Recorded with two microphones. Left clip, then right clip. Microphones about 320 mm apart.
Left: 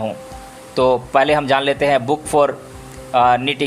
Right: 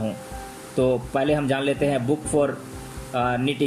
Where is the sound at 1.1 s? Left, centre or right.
Centre.